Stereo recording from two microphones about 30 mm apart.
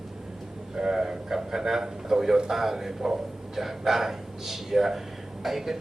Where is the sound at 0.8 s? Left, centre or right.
Right.